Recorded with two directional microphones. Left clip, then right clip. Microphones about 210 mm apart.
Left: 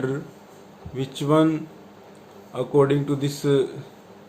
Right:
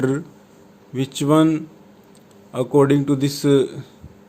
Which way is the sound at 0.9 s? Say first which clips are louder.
Right 3 dB; 50° right (ahead or behind).